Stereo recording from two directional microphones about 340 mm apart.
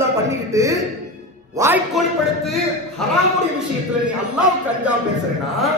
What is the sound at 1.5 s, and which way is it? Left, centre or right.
A man's voice, centre.